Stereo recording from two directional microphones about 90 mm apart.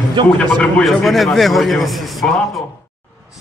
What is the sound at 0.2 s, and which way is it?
Speech, 70° right (ahead or behind).